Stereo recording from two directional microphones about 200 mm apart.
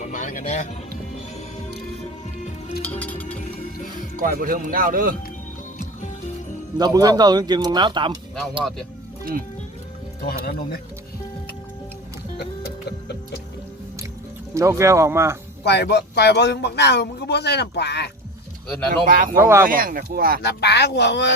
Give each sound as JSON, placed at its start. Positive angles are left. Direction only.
{"t": 0.0, "sound": "speech", "side_deg": 40}
{"t": 2.8, "sound": "music", "side_deg": 10}
{"t": 3.3, "sound": "music", "side_deg": 40}
{"t": 4.2, "sound": "speech", "side_deg": -45}
{"t": 6.7, "sound": "speech", "side_deg": -20}
{"t": 10.2, "sound": "speech", "side_deg": 50}
{"t": 12.4, "sound": "music", "side_deg": 55}
{"t": 14.5, "sound": "speech", "side_deg": -15}
{"t": 15.6, "sound": "speech", "side_deg": 55}
{"t": 19.0, "sound": "speech", "side_deg": -45}
{"t": 19.4, "sound": "speech", "side_deg": -10}
{"t": 19.6, "sound": "speech", "side_deg": -45}
{"t": 20.4, "sound": "speech", "side_deg": 55}